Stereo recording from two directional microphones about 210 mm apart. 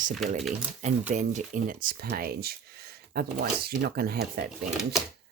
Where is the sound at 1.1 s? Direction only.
35° right (ahead or behind).